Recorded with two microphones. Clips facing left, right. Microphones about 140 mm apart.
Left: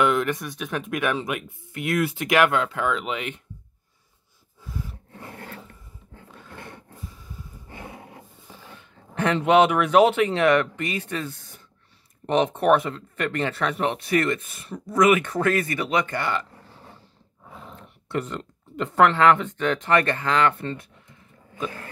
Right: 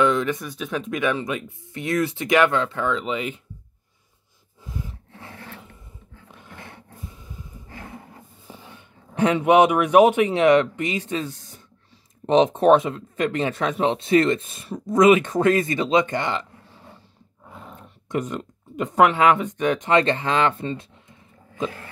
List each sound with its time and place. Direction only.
0.0 s speech: 5° left (ahead or behind)
4.6 s a sound: 15° right (ahead or behind)
9.1 s speech: 15° right (ahead or behind)
17.7 s speech: 15° right (ahead or behind)